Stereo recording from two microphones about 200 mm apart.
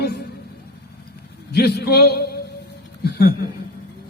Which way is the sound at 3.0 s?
55° left (ahead or behind).